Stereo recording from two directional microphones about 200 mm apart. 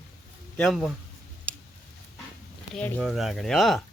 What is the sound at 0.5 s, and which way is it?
Speech, centre (ahead or behind).